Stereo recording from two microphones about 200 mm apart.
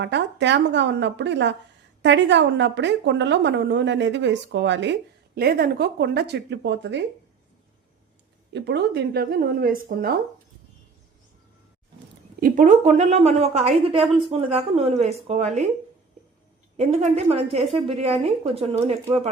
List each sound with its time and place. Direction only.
0.0 s a woman's voice: 60° right (ahead or behind)
8.5 s speech: 60° right (ahead or behind)
12.4 s a woman's voice: 40° right (ahead or behind)
16.7 s a woman's voice: 35° right (ahead or behind)